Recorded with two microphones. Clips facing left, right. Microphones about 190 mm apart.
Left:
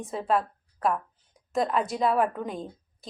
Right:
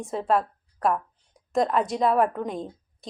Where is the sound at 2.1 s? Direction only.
30° right (ahead or behind).